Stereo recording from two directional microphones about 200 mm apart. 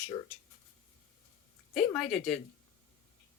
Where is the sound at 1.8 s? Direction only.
5° left (ahead or behind).